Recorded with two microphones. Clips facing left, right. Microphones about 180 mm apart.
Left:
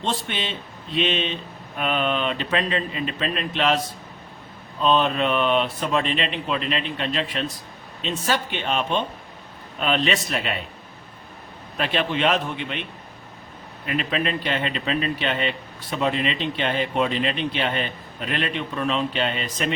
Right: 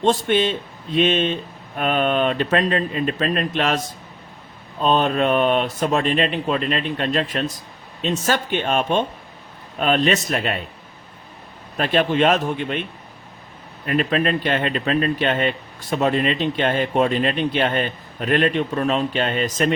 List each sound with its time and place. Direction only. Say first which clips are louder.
0.0 s speech: right 10 dB; 45° right (ahead or behind)
4.8 s speech: right 2 dB; 45° right (ahead or behind)
11.8 s speech: right 5 dB; 45° right (ahead or behind)
13.8 s speech: right 5 dB; 45° right (ahead or behind)